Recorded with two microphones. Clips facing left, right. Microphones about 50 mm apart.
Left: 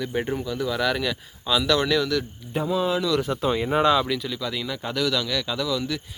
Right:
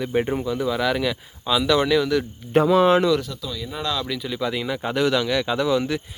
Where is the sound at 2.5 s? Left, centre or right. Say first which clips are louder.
Right 8 dB; right.